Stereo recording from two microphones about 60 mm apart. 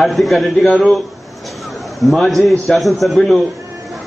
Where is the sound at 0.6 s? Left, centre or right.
Centre.